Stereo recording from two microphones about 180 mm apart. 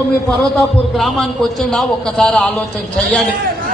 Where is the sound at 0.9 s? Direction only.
Centre (ahead or behind).